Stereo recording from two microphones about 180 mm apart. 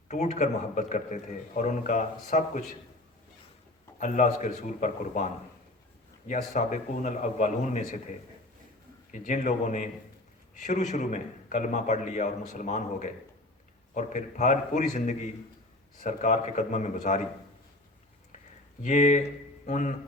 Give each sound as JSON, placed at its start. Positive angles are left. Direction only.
{"t": 0.1, "sound": "speech", "side_deg": 40}
{"t": 4.0, "sound": "speech", "side_deg": 45}
{"t": 9.1, "sound": "speech", "side_deg": 45}
{"t": 18.8, "sound": "a man's voice", "side_deg": 40}